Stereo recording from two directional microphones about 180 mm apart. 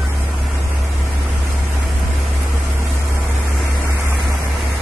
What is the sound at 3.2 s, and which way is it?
Vehicle, centre (ahead or behind).